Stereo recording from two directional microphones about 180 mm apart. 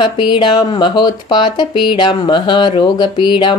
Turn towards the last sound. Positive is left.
turn(degrees=25)  # may be behind; listen again after turning